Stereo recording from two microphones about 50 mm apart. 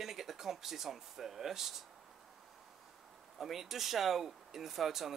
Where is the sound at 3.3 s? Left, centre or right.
Centre.